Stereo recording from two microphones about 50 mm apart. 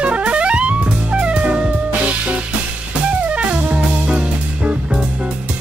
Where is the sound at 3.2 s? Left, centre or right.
Right.